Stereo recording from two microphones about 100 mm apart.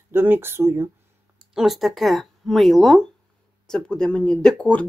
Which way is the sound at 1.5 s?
Centre (ahead or behind).